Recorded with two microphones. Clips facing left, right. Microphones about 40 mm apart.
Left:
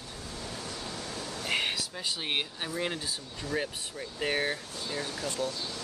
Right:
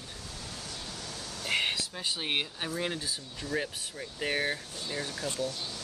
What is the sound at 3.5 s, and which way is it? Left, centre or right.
Speech, centre.